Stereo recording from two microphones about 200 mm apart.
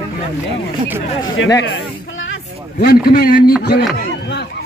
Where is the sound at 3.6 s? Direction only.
55° left (ahead or behind).